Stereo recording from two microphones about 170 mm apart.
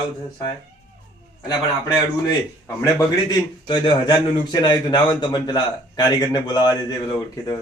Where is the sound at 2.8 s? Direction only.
25° left (ahead or behind).